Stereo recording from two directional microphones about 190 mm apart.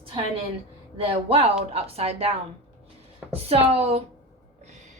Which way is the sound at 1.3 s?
30° right (ahead or behind).